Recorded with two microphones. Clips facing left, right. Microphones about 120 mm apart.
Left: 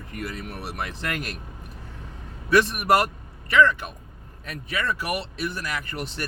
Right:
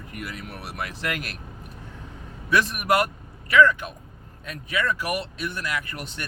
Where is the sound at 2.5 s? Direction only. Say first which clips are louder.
Left 3 dB; 35° left (ahead or behind).